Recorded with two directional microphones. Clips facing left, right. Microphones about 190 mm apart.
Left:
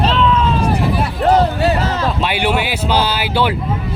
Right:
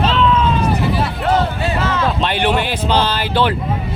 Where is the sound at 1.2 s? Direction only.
40° left (ahead or behind).